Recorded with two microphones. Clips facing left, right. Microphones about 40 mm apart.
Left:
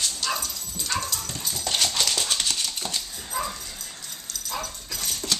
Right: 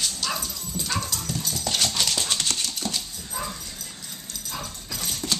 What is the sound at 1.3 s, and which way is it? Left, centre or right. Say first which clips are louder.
Dog: right 3 dB; centre.